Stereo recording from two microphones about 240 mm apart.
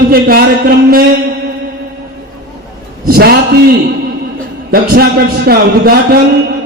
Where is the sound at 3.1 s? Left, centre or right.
Right.